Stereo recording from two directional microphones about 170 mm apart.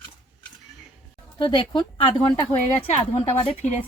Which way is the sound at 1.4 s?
25° left (ahead or behind).